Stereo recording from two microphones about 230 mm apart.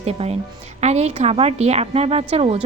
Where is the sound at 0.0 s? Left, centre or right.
Right.